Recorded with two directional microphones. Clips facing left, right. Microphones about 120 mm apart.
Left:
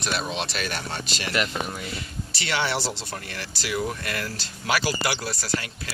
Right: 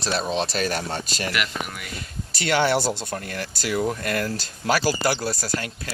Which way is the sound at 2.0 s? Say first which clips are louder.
Right 2 dB; 45° right (ahead or behind).